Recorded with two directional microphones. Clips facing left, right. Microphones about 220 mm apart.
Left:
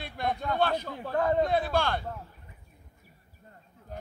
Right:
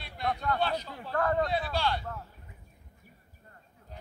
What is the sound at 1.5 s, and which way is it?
Speech, 50° left (ahead or behind).